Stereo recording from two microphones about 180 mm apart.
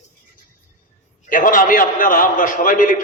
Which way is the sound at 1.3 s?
50° left (ahead or behind).